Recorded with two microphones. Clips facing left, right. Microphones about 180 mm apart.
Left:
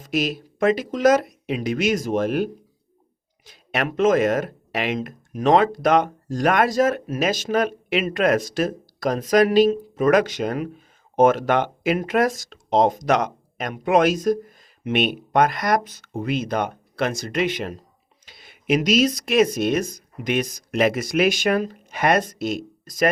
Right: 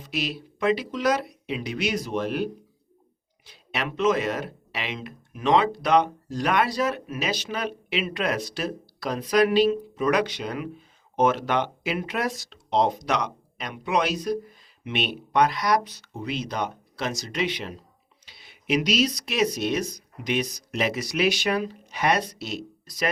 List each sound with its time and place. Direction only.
0.0 s speech: 45° left (ahead or behind)